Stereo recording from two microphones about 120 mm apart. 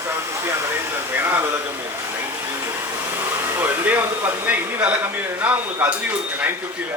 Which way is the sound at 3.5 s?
15° right (ahead or behind).